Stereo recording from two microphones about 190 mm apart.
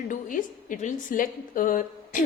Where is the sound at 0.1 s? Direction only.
45° left (ahead or behind).